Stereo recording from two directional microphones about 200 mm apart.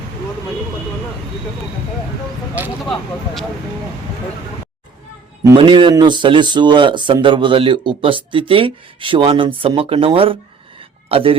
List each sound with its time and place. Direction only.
2.8 s speech: 5° left (ahead or behind)
5.4 s speech: 20° right (ahead or behind)
10.8 s a sound: 30° right (ahead or behind)